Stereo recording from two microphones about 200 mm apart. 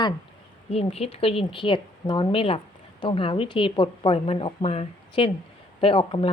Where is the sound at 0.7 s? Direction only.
30° left (ahead or behind).